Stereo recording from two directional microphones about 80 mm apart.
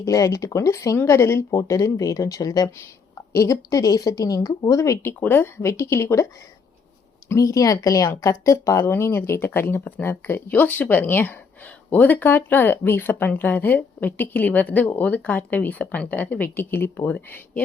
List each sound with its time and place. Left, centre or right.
0.0 s a woman's voice: left
5.2 s speech: left
7.3 s speech: left